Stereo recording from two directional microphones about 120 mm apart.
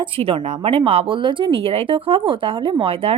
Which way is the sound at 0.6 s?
50° right (ahead or behind).